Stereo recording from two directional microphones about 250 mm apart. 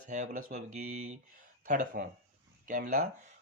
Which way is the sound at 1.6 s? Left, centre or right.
Right.